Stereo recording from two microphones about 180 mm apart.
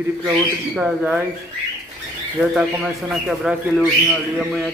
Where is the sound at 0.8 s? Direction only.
10° right (ahead or behind).